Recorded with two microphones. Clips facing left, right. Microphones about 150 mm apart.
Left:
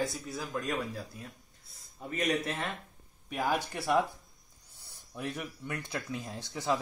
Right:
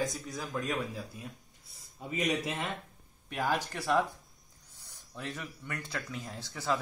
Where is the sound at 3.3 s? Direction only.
10° left (ahead or behind).